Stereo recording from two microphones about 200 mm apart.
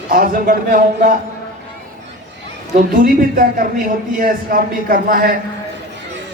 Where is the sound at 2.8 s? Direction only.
45° right (ahead or behind).